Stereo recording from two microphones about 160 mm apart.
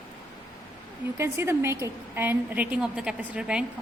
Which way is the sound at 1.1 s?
15° right (ahead or behind).